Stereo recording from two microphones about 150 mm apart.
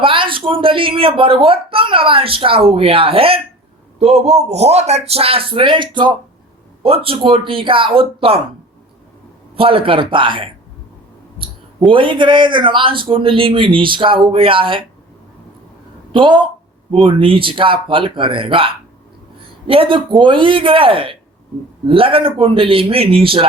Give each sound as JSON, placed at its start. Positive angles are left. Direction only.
{"t": 0.0, "sound": "speech", "side_deg": -35}
{"t": 9.6, "sound": "speech", "side_deg": -40}
{"t": 11.8, "sound": "speech", "side_deg": -35}
{"t": 16.1, "sound": "speech", "side_deg": -35}